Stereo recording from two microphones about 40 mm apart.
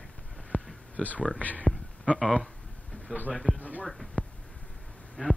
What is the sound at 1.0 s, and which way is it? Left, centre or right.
Speech, left.